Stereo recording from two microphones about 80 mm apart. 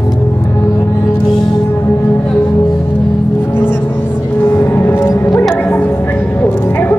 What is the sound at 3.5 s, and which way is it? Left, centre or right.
Music, left.